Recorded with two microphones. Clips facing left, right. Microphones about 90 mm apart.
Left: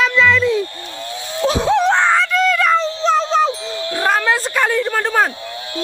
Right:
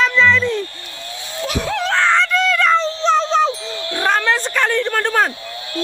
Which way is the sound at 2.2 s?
5° left (ahead or behind).